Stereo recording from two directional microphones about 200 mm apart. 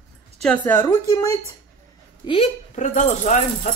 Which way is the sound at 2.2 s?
35° left (ahead or behind).